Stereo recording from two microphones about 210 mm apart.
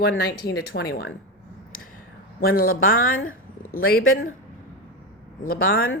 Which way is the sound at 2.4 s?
45° left (ahead or behind).